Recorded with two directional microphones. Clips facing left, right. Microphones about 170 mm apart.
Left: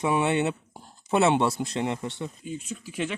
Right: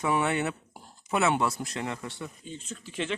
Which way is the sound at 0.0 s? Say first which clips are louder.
Left 3 dB; 20° left (ahead or behind).